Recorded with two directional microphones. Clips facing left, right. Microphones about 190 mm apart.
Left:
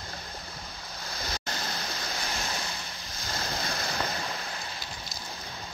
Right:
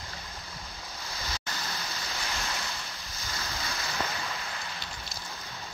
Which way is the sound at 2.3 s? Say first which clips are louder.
Even; 35° left (ahead or behind).